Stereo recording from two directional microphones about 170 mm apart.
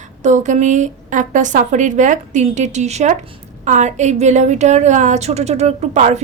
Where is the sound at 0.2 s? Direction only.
45° right (ahead or behind).